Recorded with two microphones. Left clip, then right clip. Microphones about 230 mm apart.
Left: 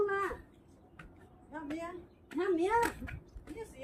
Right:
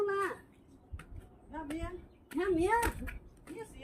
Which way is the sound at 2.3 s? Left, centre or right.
Right.